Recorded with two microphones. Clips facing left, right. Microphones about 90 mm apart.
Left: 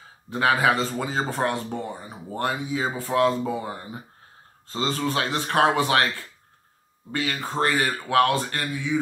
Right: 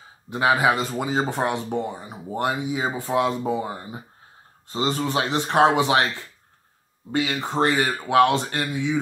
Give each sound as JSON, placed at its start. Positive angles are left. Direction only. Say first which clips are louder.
{"t": 0.3, "sound": "speech", "louder": "right 1 dB", "side_deg": -20}